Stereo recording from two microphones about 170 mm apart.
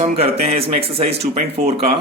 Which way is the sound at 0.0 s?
35° right (ahead or behind).